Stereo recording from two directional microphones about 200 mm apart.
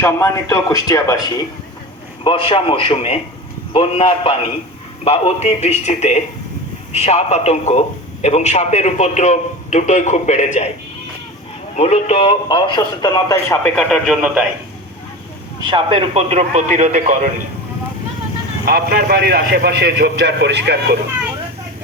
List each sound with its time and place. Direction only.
0.0 s a man's voice: 15° left (ahead or behind); by 10.7 s 35° left (ahead or behind)
11.8 s speech: 35° left (ahead or behind); by 13.6 s 15° left (ahead or behind)
13.7 s speech: centre (ahead or behind)
15.7 s a man's voice: 25° right (ahead or behind)
18.6 s a man's voice: 50° right (ahead or behind)